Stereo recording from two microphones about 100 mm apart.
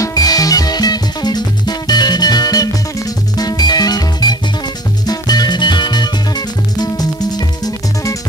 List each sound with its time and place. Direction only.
0.0 s music: 40° left (ahead or behind)